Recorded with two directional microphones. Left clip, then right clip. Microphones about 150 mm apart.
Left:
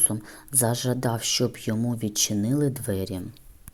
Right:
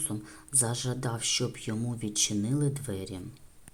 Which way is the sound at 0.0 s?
35° left (ahead or behind).